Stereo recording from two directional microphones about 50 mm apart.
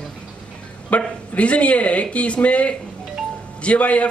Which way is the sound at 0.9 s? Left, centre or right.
Left.